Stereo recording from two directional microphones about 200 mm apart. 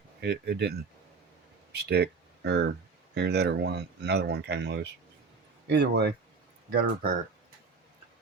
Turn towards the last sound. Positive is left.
turn(degrees=-45)  # may be behind; listen again after turning